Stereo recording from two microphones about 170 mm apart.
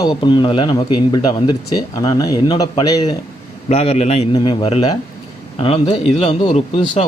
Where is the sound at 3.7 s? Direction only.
35° left (ahead or behind).